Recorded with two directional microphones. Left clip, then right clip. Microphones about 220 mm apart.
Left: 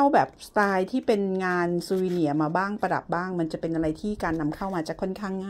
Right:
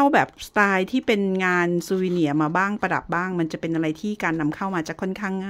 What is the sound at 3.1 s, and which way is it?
Speech, 25° right (ahead or behind).